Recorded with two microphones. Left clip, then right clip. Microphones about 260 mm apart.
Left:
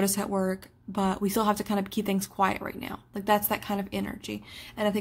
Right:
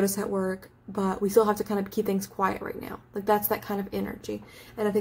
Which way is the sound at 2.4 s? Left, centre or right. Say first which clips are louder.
Left 3 dB; left.